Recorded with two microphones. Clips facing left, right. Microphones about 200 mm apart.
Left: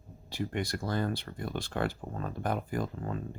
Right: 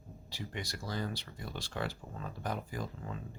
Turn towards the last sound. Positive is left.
turn(degrees=50)  # may be behind; listen again after turning